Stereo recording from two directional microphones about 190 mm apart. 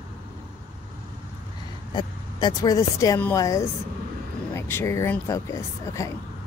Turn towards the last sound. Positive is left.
turn(degrees=15)  # may be behind; listen again after turning